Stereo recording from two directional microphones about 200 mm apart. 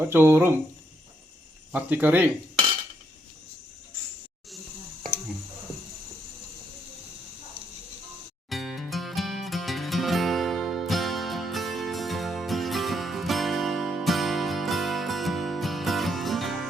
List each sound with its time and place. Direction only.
0.0 s speech: 10° right (ahead or behind)
1.7 s speech: 10° right (ahead or behind)
8.4 s music: centre (ahead or behind)